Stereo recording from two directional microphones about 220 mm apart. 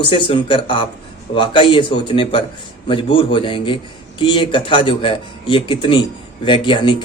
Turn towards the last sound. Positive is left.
turn(degrees=20)  # may be behind; listen again after turning